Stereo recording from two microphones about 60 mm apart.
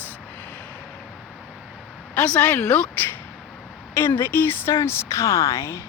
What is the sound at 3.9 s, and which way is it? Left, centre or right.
Speech, left.